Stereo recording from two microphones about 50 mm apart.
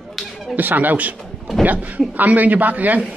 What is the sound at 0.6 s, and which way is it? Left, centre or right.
A man's voice, right.